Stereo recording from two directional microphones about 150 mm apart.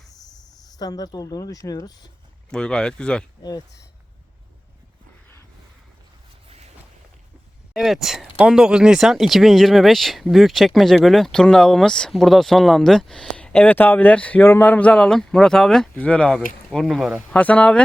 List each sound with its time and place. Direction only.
0.1 s speech: 25° left (ahead or behind)
2.5 s speech: 5° left (ahead or behind)
7.7 s speech: centre (ahead or behind)
17.3 s speech: 10° left (ahead or behind)